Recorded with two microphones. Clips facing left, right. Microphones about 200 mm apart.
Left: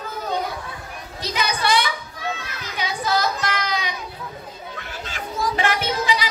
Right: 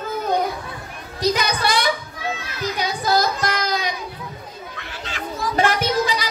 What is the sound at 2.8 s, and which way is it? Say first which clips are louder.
Child singing: right 2 dB; 40° right (ahead or behind).